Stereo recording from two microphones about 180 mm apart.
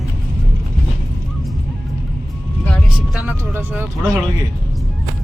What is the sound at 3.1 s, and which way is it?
Speech, 10° right (ahead or behind).